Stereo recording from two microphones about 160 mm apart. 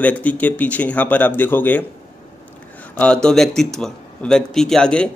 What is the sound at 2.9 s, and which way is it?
Speech, 5° left (ahead or behind).